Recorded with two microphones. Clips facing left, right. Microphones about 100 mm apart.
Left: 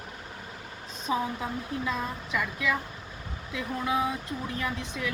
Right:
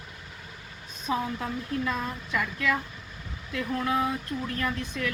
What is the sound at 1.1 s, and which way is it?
A woman's voice, 15° left (ahead or behind).